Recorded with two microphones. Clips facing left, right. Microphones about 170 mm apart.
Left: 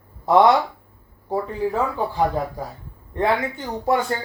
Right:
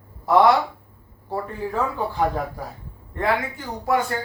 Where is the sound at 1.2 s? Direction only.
15° left (ahead or behind).